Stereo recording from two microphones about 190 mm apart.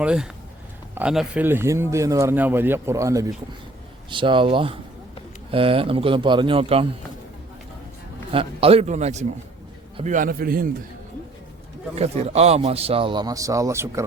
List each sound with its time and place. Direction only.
0.0 s a man's voice: 5° right (ahead or behind); by 6.8 s 30° right (ahead or behind)
8.3 s a man's voice: 30° right (ahead or behind); by 10.7 s 50° right (ahead or behind)
11.9 s a man's voice: 35° right (ahead or behind); by 14.0 s 15° right (ahead or behind)